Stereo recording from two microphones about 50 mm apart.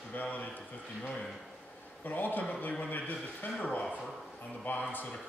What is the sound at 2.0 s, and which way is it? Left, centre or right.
A man's voice, left.